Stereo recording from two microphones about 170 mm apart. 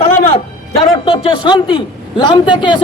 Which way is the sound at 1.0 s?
30° left (ahead or behind).